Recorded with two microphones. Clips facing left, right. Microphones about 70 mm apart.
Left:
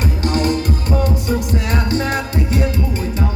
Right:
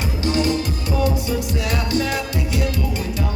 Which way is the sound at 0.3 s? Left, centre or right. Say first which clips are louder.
Left 1 dB; left.